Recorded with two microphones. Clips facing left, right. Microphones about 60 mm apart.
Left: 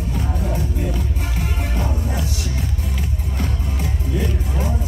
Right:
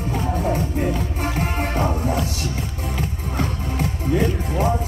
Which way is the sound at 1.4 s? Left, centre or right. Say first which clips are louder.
Right 4 dB; right.